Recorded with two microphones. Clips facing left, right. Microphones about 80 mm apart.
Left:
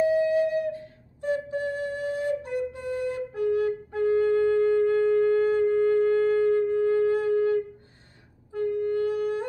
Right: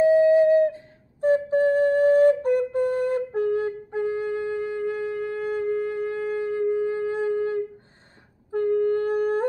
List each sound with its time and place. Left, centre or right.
0.0 s flute: right
8.5 s wind instrument: right